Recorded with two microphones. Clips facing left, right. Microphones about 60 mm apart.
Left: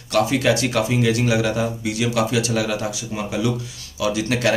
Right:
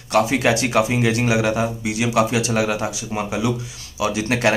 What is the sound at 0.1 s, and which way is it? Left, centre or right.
Speech, right.